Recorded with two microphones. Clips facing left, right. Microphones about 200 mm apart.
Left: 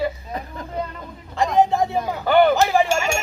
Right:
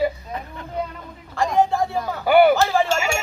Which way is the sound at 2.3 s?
10° right (ahead or behind).